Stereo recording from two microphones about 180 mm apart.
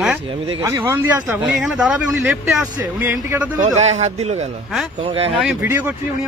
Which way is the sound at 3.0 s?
15° right (ahead or behind).